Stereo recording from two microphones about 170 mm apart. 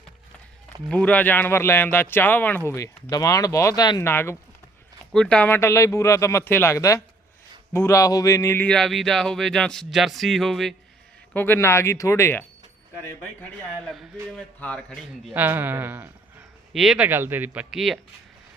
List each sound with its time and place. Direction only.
0.9 s speech: 5° left (ahead or behind)
11.3 s speech: 15° left (ahead or behind)
15.3 s speech: 10° right (ahead or behind)
16.7 s speech: centre (ahead or behind)
17.1 s speech: 10° right (ahead or behind)